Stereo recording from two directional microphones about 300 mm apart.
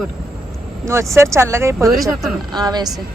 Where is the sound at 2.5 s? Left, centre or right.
Centre.